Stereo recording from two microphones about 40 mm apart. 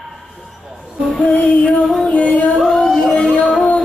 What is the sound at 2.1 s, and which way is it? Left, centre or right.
Music, left.